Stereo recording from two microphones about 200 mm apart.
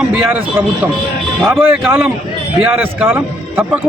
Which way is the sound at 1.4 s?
10° right (ahead or behind).